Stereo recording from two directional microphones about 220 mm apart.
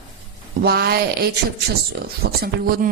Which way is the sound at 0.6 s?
45° right (ahead or behind).